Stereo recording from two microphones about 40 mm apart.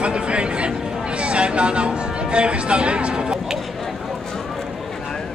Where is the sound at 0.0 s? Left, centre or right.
Right.